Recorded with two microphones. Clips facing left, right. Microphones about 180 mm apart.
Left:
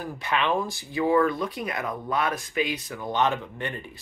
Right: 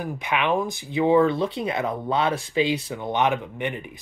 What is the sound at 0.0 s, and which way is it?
Speech, 15° right (ahead or behind).